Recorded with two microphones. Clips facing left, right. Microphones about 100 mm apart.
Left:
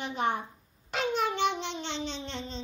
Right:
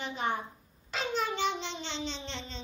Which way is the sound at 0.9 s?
60° left (ahead or behind).